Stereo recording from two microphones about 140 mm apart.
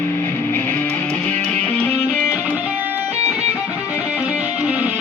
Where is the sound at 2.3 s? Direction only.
10° right (ahead or behind).